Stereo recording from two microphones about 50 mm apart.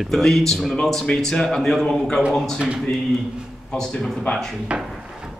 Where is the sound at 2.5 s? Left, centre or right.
Centre.